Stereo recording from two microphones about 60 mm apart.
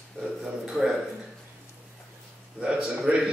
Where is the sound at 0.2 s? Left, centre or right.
Centre.